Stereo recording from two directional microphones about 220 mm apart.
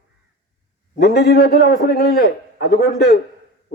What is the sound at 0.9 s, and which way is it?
A man's voice, 45° left (ahead or behind).